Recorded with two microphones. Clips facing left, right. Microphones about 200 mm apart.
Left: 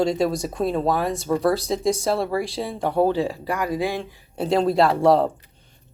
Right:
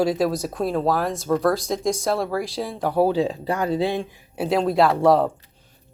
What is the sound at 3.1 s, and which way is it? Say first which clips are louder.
Speech: right 2 dB; 20° right (ahead or behind).